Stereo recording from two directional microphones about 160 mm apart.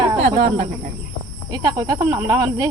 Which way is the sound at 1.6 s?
25° right (ahead or behind).